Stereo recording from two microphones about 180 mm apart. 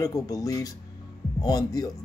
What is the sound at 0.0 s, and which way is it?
Speech, 20° left (ahead or behind).